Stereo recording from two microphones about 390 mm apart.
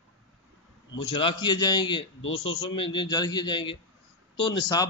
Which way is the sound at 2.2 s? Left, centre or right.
Left.